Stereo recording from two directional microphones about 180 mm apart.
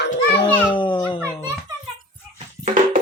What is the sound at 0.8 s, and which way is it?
Children playing, 25° left (ahead or behind).